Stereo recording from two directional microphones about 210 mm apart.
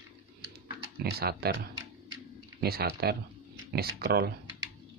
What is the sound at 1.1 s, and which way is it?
Speech, 50° right (ahead or behind).